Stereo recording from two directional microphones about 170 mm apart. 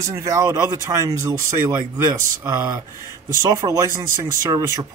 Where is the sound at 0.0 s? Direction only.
20° right (ahead or behind).